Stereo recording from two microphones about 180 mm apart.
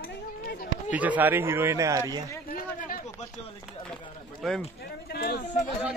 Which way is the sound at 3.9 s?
Centre (ahead or behind).